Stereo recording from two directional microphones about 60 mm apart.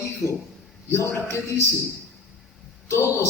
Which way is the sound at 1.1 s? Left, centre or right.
Left.